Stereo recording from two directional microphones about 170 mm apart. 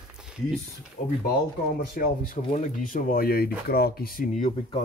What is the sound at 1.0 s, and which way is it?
Speech, 50° left (ahead or behind).